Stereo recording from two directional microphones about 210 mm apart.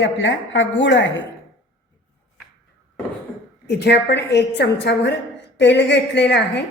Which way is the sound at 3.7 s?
55° left (ahead or behind).